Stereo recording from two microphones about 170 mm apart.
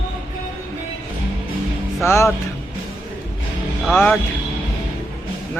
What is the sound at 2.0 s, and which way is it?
Speech, 15° left (ahead or behind).